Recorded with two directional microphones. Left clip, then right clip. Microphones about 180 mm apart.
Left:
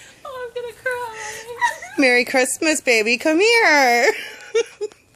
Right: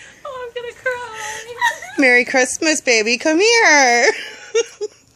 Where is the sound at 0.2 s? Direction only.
60° left (ahead or behind).